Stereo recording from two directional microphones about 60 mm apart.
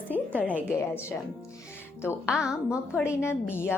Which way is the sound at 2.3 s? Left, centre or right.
Centre.